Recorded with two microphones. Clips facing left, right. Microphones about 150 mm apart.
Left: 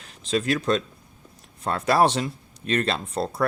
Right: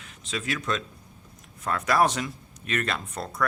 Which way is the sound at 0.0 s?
35° left (ahead or behind).